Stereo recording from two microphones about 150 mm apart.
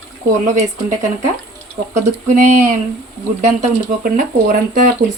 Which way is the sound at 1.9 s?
55° right (ahead or behind).